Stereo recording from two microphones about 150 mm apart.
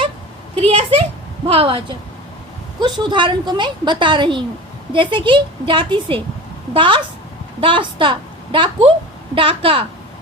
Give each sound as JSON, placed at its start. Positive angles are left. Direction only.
{"t": 0.5, "sound": "a sound", "side_deg": -40}
{"t": 1.5, "sound": "a woman's voice", "side_deg": -35}
{"t": 2.8, "sound": "a woman's voice", "side_deg": -30}